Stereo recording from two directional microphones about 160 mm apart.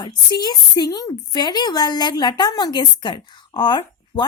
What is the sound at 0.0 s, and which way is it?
A woman's voice, 25° left (ahead or behind).